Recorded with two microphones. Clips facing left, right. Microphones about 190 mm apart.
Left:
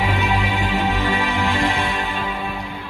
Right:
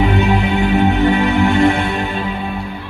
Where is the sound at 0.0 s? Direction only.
50° right (ahead or behind).